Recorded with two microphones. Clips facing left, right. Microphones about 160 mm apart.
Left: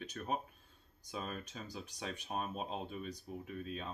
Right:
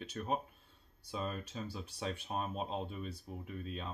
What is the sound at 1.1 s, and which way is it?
Speech, 30° right (ahead or behind).